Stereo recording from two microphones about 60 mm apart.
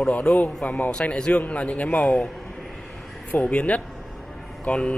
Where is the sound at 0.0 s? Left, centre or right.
Left.